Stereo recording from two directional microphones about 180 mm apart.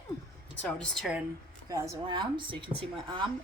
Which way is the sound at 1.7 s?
25° right (ahead or behind).